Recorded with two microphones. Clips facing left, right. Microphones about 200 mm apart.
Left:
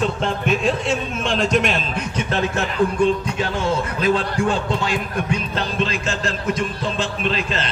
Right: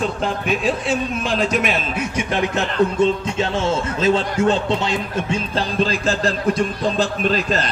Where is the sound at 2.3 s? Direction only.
15° right (ahead or behind).